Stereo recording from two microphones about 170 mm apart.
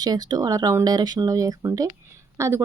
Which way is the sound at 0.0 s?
25° right (ahead or behind).